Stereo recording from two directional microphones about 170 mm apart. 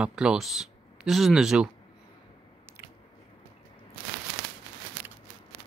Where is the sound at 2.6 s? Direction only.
15° right (ahead or behind).